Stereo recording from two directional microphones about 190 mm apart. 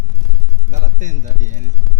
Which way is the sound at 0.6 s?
40° right (ahead or behind).